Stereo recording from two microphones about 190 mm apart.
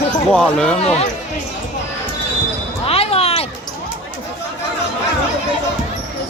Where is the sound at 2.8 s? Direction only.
30° left (ahead or behind).